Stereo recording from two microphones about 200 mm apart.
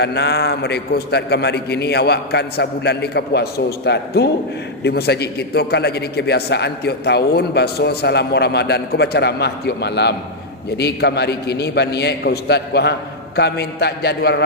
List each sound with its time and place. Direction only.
0.0 s a man's voice: 55° left (ahead or behind)